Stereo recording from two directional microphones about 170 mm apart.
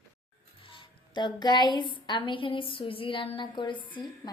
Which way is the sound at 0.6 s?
30° left (ahead or behind).